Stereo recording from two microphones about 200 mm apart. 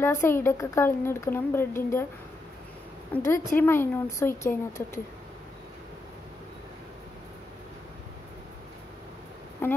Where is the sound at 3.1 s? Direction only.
10° left (ahead or behind).